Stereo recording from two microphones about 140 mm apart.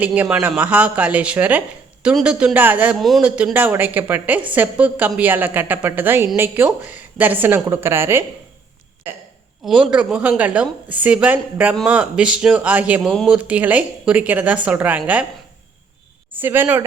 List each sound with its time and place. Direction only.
0.0 s a woman's voice: 10° right (ahead or behind)
9.6 s a woman's voice: 5° right (ahead or behind)
13.0 s a woman's voice: centre (ahead or behind)
16.3 s a woman's voice: 15° right (ahead or behind)